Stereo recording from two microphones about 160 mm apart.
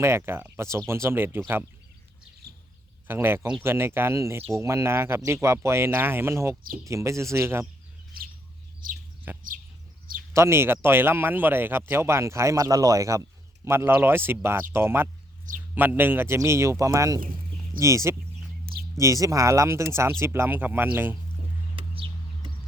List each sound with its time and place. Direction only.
0.0 s speech: 15° right (ahead or behind)
3.1 s speech: 15° right (ahead or behind)
9.3 s bird: 15° right (ahead or behind)
10.3 s speech: 15° right (ahead or behind)
21.8 s a sound: 35° right (ahead or behind)